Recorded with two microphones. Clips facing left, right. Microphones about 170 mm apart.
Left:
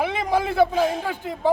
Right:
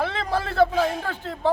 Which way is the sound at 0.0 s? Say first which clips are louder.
Left 3 dB; 15° left (ahead or behind).